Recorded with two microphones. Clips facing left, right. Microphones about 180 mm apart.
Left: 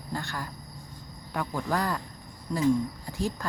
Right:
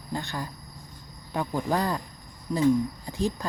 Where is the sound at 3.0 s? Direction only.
20° right (ahead or behind).